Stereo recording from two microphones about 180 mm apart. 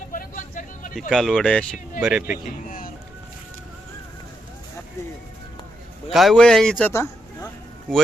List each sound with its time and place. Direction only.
0.1 s vehicle: 50° left (ahead or behind)
1.1 s speech: centre (ahead or behind)
2.0 s speech: 10° right (ahead or behind)
2.6 s music: 50° left (ahead or behind)
6.1 s speech: centre (ahead or behind)